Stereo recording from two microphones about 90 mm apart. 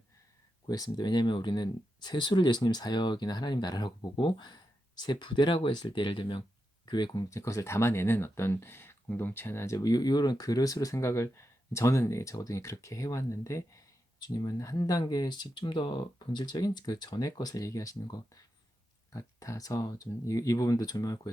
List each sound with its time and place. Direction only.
0.7 s speech: 50° left (ahead or behind); by 6.4 s 65° left (ahead or behind)
6.8 s speech: 55° left (ahead or behind); by 9.7 s 25° left (ahead or behind)
9.7 s speech: 45° left (ahead or behind)